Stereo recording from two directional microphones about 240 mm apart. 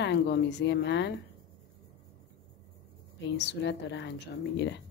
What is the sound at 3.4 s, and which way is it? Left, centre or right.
Speech, left.